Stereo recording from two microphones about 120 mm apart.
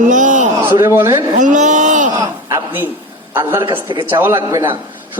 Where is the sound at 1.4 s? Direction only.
90° right.